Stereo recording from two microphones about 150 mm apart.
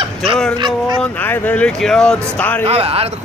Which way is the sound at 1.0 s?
10° left (ahead or behind).